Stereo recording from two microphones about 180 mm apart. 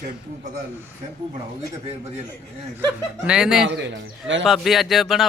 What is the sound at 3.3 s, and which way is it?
Speech, 5° right (ahead or behind).